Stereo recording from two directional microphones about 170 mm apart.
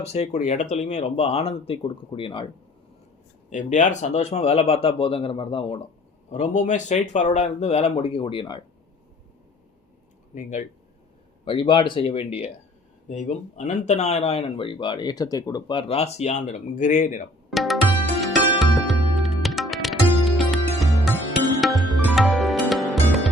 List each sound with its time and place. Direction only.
0.0 s speech: 40° left (ahead or behind)
3.5 s speech: 45° left (ahead or behind); by 5.8 s 30° left (ahead or behind)
6.3 s speech: 45° left (ahead or behind); by 8.6 s 30° left (ahead or behind)
11.4 s speech: 30° left (ahead or behind); by 17.2 s 45° left (ahead or behind)
17.5 s music: centre (ahead or behind)